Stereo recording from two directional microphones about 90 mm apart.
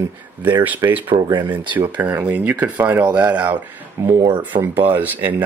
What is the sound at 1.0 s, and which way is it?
Speech, 60° right (ahead or behind).